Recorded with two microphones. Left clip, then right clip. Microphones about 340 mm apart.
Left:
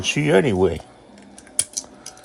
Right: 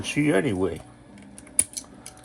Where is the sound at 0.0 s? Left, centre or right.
Left.